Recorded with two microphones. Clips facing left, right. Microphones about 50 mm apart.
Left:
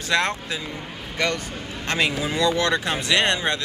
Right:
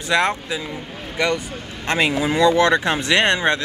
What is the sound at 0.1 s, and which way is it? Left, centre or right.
Speech, centre.